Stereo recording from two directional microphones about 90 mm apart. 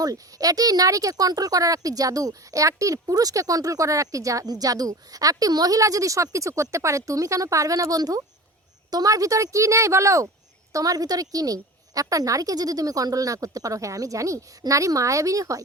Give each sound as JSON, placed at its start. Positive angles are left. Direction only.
{"t": 0.0, "sound": "speech", "side_deg": -45}